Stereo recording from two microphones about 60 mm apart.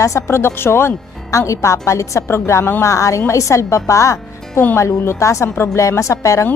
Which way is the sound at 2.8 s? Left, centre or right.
Left.